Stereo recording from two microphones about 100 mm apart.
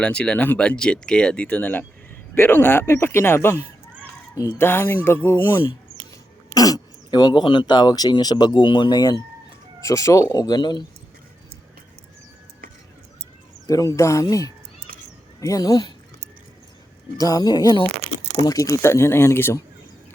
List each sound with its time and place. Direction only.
0.0 s a man's voice: 10° left (ahead or behind)
6.5 s speech: 40° left (ahead or behind)
9.8 s speech: 30° left (ahead or behind)
13.7 s speech: 35° left (ahead or behind)
17.2 s a man's voice: 40° left (ahead or behind)